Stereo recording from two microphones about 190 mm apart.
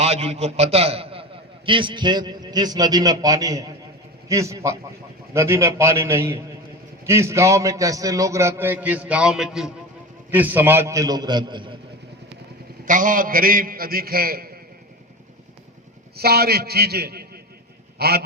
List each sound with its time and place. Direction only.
0.0 s a man's voice: 35° right (ahead or behind)
12.8 s a man's voice: 45° right (ahead or behind)
16.1 s a man's voice: 55° right (ahead or behind)
17.9 s a sound: 55° right (ahead or behind)